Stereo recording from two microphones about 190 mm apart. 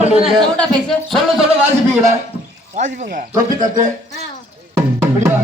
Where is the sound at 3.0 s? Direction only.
45° right (ahead or behind).